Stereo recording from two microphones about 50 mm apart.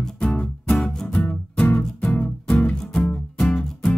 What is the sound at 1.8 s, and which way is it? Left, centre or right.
Music, centre.